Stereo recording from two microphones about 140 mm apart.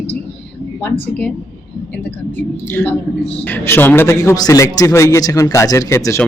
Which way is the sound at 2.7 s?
15° left (ahead or behind).